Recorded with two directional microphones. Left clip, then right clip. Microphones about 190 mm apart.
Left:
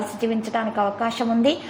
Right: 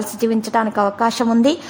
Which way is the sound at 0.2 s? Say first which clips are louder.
Right 7 dB; 35° right (ahead or behind).